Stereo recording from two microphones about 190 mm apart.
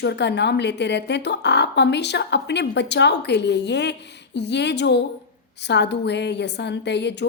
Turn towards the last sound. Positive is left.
turn(degrees=65)  # may be behind; listen again after turning